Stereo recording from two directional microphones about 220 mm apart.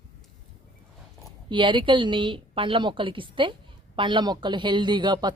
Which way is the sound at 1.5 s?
20° right (ahead or behind).